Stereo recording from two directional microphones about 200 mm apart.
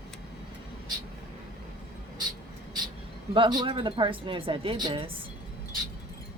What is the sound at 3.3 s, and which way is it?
A woman's voice, 25° right (ahead or behind).